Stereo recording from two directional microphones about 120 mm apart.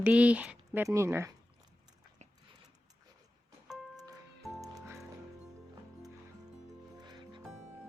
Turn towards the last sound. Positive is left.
turn(degrees=-40)  # may be behind; listen again after turning